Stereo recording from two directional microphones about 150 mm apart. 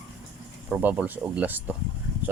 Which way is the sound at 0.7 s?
10° right (ahead or behind).